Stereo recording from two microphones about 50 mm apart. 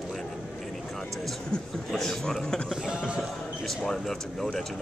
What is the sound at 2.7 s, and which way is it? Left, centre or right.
Speech, centre.